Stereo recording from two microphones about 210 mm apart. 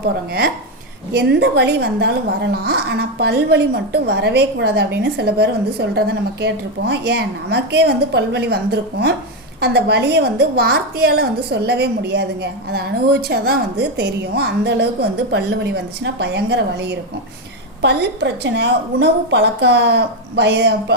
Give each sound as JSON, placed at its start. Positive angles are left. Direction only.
{"t": 0.0, "sound": "a woman's voice", "side_deg": -50}